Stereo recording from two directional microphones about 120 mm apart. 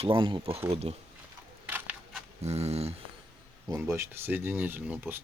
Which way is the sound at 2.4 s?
60° right (ahead or behind).